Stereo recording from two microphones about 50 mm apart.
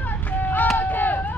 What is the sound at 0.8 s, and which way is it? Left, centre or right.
Run, left.